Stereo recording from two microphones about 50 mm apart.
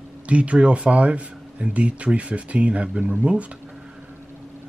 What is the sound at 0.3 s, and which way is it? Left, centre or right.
Speech, right.